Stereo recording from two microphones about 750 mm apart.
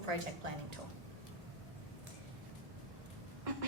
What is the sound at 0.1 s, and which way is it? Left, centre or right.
Speech, right.